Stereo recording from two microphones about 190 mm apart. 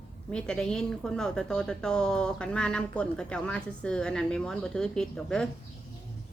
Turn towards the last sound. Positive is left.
turn(degrees=5)  # may be behind; listen again after turning